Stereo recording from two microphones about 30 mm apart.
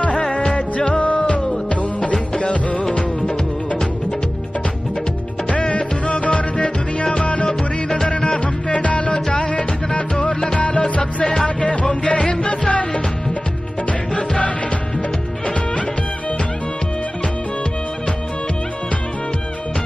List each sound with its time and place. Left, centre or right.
0.5 s music: left
5.5 s music: left
7.4 s music: centre
8.2 s music: left
8.7 s music: left
9.1 s music: left
10.8 s music: left
11.2 s music: left
11.6 s music: left
15.0 s music: left